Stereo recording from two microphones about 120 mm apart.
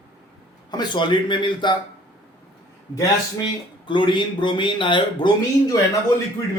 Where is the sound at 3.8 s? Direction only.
40° left (ahead or behind).